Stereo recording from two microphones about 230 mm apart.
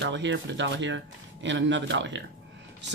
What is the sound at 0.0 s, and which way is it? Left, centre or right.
Speech, right.